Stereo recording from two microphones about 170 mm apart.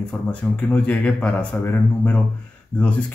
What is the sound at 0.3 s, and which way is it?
A woman's voice, 10° left (ahead or behind).